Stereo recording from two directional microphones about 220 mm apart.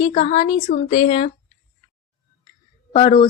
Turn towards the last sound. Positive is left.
turn(degrees=25)  # may be behind; listen again after turning